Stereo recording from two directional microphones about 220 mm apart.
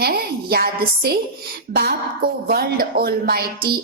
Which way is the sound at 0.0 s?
45° right (ahead or behind).